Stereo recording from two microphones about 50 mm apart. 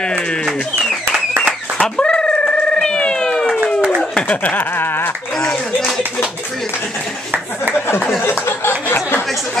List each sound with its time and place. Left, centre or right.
1.8 s cat: centre
4.3 s a sound: left
8.2 s speech: left